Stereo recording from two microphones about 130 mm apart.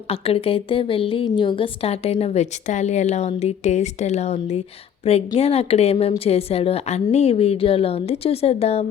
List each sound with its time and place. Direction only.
0.1 s a woman's voice: 45° left (ahead or behind)